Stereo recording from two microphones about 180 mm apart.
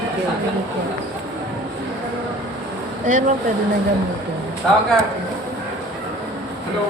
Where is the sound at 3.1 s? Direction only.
45° right (ahead or behind).